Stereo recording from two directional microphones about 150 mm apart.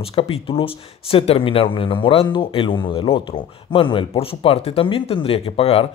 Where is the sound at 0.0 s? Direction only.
40° left (ahead or behind).